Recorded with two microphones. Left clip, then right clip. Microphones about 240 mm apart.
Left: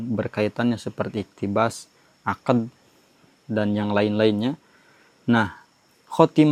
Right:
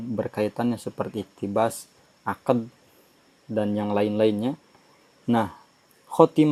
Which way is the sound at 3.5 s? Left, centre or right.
Left.